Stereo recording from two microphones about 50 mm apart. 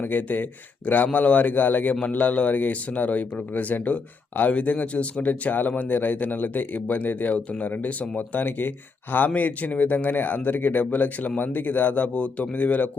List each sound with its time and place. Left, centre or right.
0.0 s speech: left
8.3 s speech: left